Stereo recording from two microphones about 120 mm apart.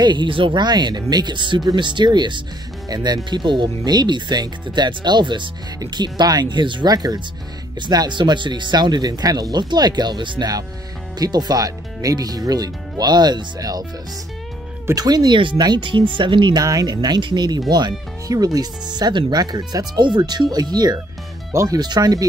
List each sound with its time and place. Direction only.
0.0 s speech: 40° right (ahead or behind)
14.9 s speech: 30° right (ahead or behind)